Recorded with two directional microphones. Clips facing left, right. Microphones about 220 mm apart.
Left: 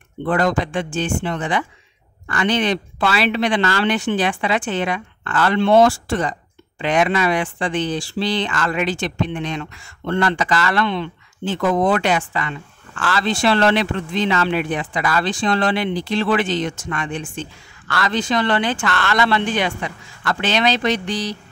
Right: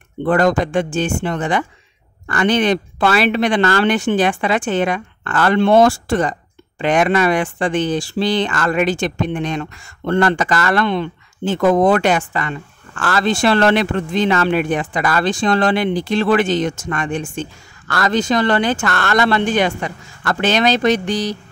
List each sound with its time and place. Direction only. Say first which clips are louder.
0.2 s speech: right 4 dB; 45° right (ahead or behind)